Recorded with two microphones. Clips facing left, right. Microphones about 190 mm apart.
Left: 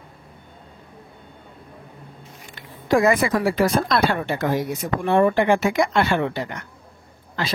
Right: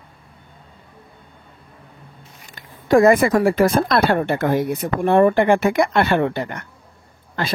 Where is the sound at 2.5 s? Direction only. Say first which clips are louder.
Right 4 dB; 55° right (ahead or behind).